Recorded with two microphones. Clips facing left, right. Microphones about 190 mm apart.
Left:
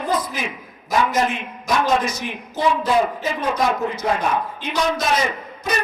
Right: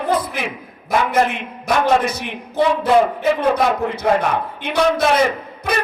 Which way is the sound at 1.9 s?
60° right (ahead or behind).